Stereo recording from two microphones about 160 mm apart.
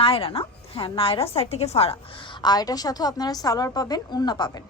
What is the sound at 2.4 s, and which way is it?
A woman's voice, 25° left (ahead or behind).